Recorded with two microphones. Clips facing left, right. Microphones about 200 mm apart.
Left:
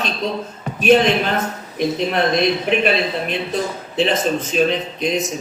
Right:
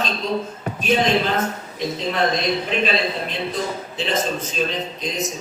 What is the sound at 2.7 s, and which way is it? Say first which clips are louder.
Speech: left 4 dB; 60° left (ahead or behind).